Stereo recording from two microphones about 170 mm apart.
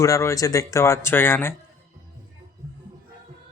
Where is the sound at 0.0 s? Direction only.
20° left (ahead or behind).